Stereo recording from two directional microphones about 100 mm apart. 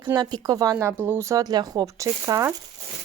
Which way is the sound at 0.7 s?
20° right (ahead or behind).